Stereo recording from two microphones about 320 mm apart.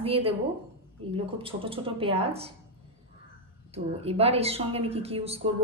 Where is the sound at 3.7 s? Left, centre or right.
Centre.